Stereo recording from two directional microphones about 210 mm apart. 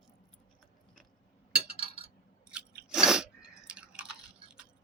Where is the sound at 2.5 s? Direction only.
Centre (ahead or behind).